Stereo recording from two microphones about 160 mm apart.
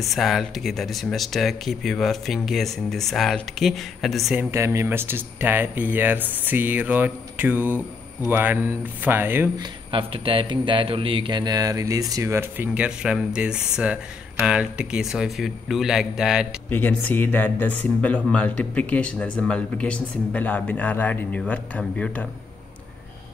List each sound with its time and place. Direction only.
0.0 s speech: centre (ahead or behind)
4.4 s speech: 15° right (ahead or behind)
9.6 s a man's voice: 35° right (ahead or behind); by 16.4 s 5° right (ahead or behind)
16.6 s speech: 10° left (ahead or behind)